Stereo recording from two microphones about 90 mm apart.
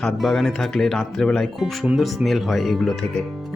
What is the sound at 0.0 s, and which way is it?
Speech, 5° left (ahead or behind).